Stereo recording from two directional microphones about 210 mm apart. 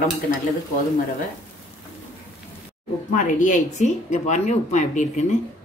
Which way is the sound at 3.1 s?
35° left (ahead or behind).